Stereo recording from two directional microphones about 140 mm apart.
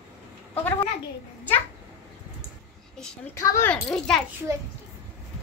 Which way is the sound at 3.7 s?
5° left (ahead or behind).